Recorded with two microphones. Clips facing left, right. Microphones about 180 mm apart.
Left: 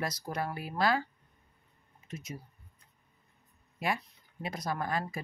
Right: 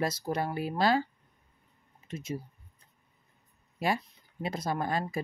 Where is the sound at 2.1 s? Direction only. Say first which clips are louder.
Right 6 dB; 30° right (ahead or behind).